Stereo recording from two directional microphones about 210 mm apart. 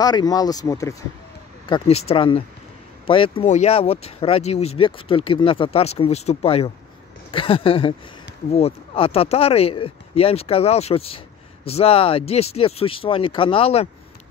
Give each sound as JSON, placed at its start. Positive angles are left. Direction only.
{"t": 0.0, "sound": "speech", "side_deg": 20}
{"t": 1.7, "sound": "speech", "side_deg": 30}
{"t": 7.2, "sound": "a sound", "side_deg": 25}
{"t": 8.5, "sound": "speech", "side_deg": 30}